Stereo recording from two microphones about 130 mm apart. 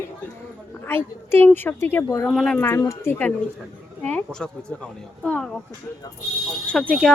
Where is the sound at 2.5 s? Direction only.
15° left (ahead or behind).